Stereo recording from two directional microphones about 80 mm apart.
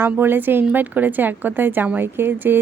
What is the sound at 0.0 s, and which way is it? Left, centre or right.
A woman's voice, right.